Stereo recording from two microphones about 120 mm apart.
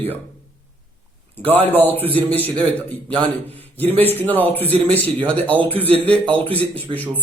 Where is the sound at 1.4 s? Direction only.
55° right (ahead or behind).